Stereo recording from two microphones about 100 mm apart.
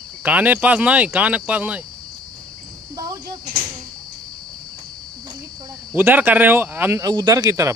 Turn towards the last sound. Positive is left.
turn(degrees=-35)  # may be behind; listen again after turning